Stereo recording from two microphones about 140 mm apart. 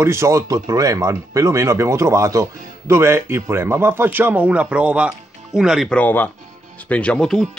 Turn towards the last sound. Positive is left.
turn(degrees=5)  # may be behind; listen again after turning